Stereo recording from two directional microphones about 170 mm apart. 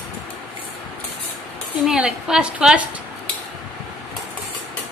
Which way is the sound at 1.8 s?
5° right (ahead or behind).